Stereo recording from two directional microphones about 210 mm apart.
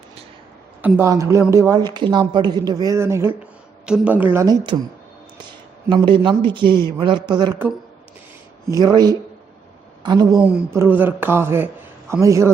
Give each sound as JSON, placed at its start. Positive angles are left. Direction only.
{"t": 0.8, "sound": "a woman's voice", "side_deg": -10}
{"t": 5.9, "sound": "a man's voice", "side_deg": -20}
{"t": 8.7, "sound": "a man's voice", "side_deg": -20}
{"t": 10.4, "sound": "a woman's voice", "side_deg": -10}